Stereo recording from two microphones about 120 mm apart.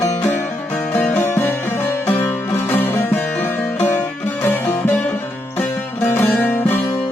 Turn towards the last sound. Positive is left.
turn(degrees=15)  # may be behind; listen again after turning